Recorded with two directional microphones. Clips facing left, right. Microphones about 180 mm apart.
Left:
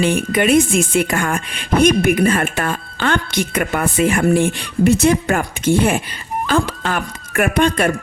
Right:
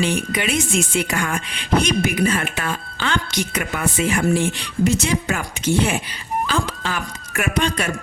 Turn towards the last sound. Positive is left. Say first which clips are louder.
# left 6 dB
turn(degrees=55)  # may be behind; listen again after turning